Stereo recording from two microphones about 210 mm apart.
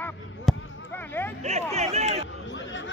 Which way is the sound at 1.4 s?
30° right (ahead or behind).